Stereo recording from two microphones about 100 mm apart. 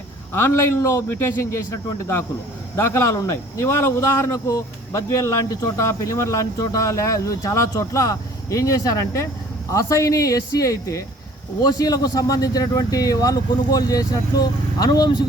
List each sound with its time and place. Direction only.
0.3 s a man's voice: 25° left (ahead or behind)